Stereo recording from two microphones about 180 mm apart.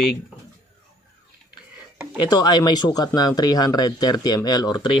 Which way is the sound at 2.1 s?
20° left (ahead or behind).